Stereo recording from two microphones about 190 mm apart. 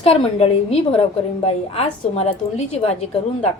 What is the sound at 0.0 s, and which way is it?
A woman's voice, 30° left (ahead or behind).